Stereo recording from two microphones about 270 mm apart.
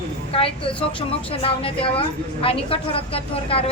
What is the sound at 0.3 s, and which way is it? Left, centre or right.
A woman's voice, left.